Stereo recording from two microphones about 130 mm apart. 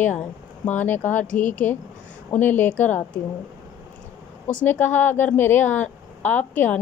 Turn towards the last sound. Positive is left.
turn(degrees=15)  # may be behind; listen again after turning